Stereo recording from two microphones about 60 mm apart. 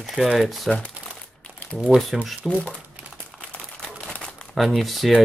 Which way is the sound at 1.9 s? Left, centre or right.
Centre.